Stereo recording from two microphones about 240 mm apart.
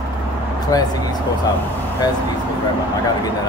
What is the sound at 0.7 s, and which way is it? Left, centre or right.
Speech, centre.